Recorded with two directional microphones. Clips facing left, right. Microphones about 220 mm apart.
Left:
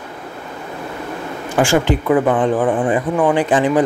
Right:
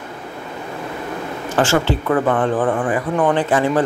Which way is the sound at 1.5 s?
15° left (ahead or behind).